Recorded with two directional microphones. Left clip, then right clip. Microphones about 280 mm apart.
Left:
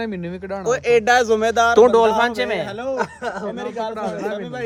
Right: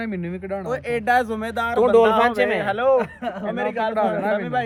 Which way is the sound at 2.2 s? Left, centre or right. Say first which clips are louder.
Right 1 dB; centre.